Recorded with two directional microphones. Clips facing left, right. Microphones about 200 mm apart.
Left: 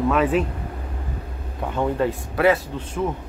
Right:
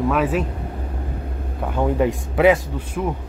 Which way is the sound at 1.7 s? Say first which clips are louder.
Right 2 dB; 15° right (ahead or behind).